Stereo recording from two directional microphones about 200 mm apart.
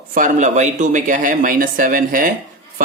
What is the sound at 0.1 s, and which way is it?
Speech, 40° right (ahead or behind).